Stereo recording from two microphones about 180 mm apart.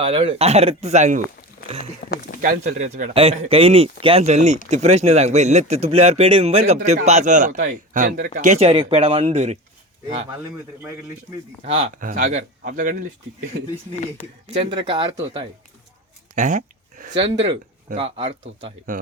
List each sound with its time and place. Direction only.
0.0 s speech: 30° right (ahead or behind)
1.8 s speech: 50° left (ahead or behind)
2.4 s speech: 45° right (ahead or behind)
11.9 s speech: 50° right (ahead or behind)
14.4 s speech: 35° right (ahead or behind)
16.3 s speech: 45° right (ahead or behind)
17.9 s speech: 30° right (ahead or behind)